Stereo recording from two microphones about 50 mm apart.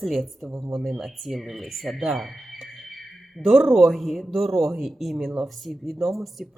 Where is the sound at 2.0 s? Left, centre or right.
Centre.